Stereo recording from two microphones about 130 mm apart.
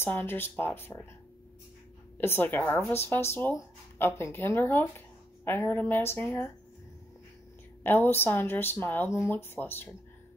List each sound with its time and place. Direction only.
0.0 s speech: 15° left (ahead or behind)
2.1 s speech: 15° left (ahead or behind)
7.8 s speech: 15° left (ahead or behind)